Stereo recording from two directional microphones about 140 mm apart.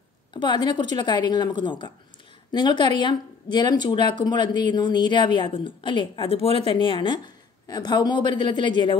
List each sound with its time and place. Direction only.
0.3 s speech: 30° left (ahead or behind)